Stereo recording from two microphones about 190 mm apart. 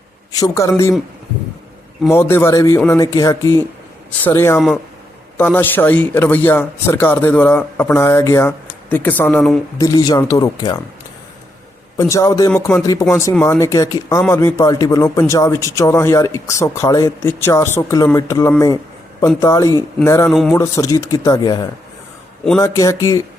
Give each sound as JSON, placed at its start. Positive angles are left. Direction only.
{"t": 0.3, "sound": "speech", "side_deg": 15}
{"t": 2.0, "sound": "speech", "side_deg": 15}
{"t": 9.7, "sound": "speech", "side_deg": 20}
{"t": 11.9, "sound": "speech", "side_deg": 15}
{"t": 12.5, "sound": "speech", "side_deg": 5}